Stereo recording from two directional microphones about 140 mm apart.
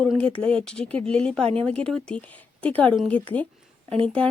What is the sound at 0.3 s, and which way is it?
Speech, 40° right (ahead or behind).